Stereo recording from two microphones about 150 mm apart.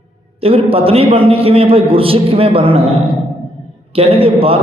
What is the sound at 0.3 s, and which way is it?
A man's voice, 40° right (ahead or behind).